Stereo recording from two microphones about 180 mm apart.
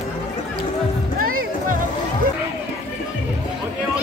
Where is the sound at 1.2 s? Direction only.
55° right (ahead or behind).